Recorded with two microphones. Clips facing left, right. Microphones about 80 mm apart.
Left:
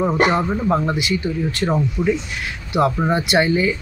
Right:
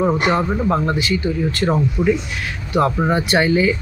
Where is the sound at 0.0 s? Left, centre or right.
Centre.